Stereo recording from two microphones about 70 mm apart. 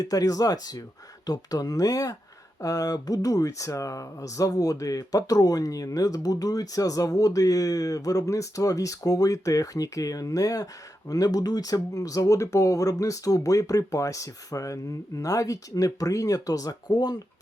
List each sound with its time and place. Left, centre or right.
0.0 s speech: left